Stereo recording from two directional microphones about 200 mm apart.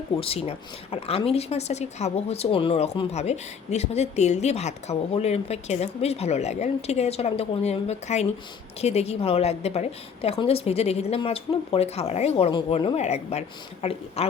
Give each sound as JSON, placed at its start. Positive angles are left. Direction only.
{"t": 0.2, "sound": "a woman's voice", "side_deg": 30}